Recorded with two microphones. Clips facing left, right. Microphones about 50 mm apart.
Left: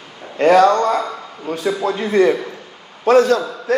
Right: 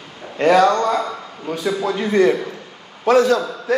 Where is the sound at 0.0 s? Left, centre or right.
Centre.